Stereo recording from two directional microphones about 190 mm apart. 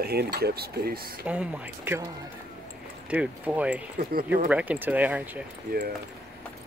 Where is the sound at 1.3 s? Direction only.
5° right (ahead or behind).